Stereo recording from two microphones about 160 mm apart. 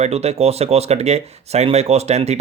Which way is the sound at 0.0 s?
40° right (ahead or behind).